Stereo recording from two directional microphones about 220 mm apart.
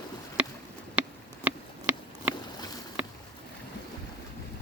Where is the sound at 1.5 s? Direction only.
5° right (ahead or behind).